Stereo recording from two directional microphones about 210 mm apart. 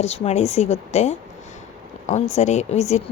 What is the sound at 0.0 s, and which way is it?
Speech, 30° left (ahead or behind).